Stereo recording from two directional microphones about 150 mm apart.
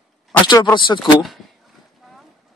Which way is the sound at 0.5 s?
30° left (ahead or behind).